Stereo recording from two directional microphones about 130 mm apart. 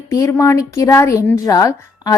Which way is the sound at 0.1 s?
25° left (ahead or behind).